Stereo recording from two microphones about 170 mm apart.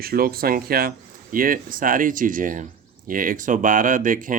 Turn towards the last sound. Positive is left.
turn(degrees=-50)  # may be behind; listen again after turning